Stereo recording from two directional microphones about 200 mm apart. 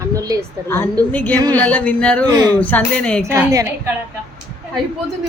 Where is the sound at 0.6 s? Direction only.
10° left (ahead or behind).